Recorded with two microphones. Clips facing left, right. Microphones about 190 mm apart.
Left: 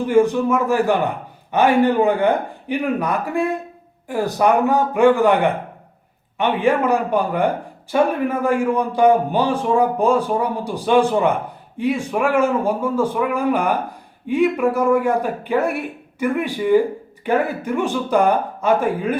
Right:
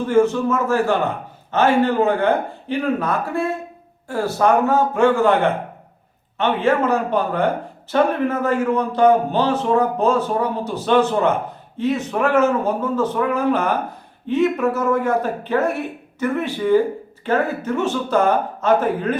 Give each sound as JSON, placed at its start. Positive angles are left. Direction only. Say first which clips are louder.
{"t": 0.0, "sound": "speech", "louder": "left 1 dB", "side_deg": 15}